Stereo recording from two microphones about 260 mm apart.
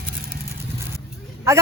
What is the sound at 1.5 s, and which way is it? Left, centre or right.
Speech, centre.